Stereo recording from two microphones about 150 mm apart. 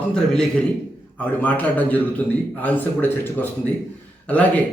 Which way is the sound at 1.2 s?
10° left (ahead or behind).